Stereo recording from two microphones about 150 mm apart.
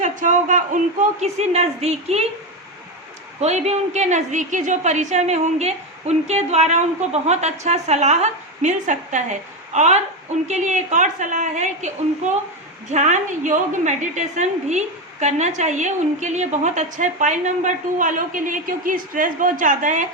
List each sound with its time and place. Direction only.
0.0 s a woman's voice: 55° right (ahead or behind)
3.4 s a woman's voice: 45° right (ahead or behind)